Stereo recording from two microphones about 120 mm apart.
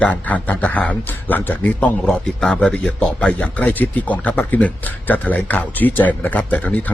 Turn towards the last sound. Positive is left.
turn(degrees=10)  # may be behind; listen again after turning